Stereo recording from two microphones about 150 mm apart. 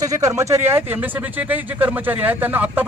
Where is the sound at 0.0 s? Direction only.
20° right (ahead or behind).